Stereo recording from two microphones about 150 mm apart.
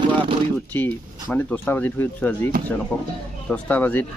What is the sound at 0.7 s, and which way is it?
Speech, 10° left (ahead or behind).